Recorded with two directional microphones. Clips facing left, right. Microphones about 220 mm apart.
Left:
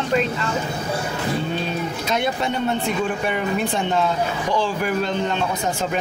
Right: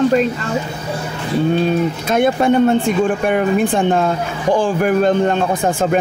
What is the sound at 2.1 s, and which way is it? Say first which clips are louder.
Speech: right 10 dB; 50° right (ahead or behind).